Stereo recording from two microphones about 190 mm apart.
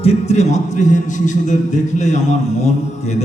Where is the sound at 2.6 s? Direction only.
35° left (ahead or behind).